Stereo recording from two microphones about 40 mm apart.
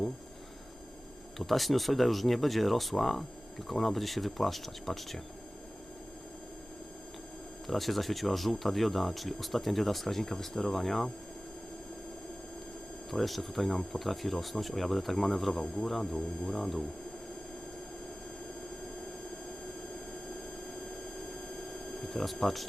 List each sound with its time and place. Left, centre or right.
1.4 s speech: centre
7.7 s speech: centre
13.1 s speech: centre
21.7 s a sound: centre
22.2 s speech: centre